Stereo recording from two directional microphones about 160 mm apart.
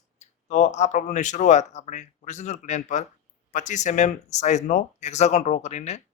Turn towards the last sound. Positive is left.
turn(degrees=45)  # may be behind; listen again after turning